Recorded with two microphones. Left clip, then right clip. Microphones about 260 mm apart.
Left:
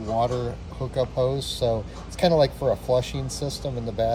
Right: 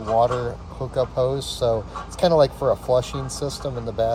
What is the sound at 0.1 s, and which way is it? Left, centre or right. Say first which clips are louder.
Speech: right 5 dB; centre.